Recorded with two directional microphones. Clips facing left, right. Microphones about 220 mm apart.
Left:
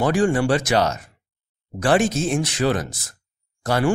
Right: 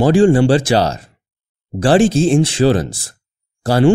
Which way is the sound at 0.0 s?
30° right (ahead or behind).